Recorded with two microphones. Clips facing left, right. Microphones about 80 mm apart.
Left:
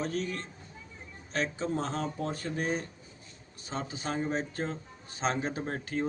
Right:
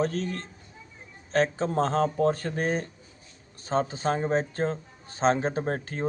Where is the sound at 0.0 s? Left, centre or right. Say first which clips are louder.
Right 5 dB; right.